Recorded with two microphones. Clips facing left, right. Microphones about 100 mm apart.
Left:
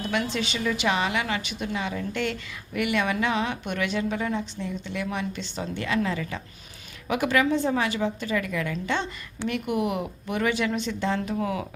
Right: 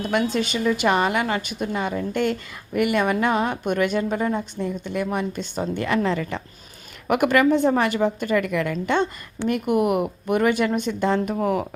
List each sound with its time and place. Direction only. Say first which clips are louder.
0.1 s a woman's voice: right 6 dB; 50° right (ahead or behind)